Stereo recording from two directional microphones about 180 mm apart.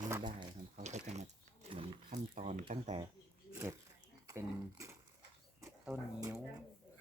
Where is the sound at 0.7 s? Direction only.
40° right (ahead or behind).